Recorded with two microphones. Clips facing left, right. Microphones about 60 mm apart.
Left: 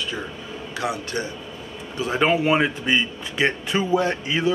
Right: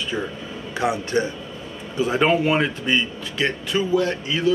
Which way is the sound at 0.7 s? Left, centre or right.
Right.